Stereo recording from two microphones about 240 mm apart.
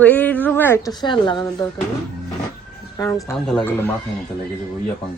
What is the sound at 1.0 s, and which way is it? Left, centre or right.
Speech, centre.